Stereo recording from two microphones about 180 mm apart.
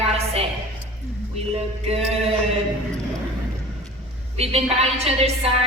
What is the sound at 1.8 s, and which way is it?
Speech, 35° right (ahead or behind).